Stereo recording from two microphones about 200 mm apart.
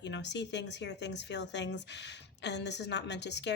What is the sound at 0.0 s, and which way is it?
Speech, 60° left (ahead or behind).